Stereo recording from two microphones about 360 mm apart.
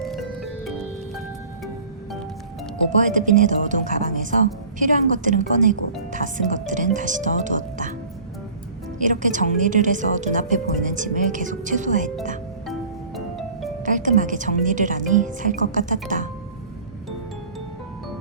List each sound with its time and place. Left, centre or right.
0.0 s music: centre
2.9 s speech: right
9.0 s speech: right
13.1 s music: centre
13.8 s speech: right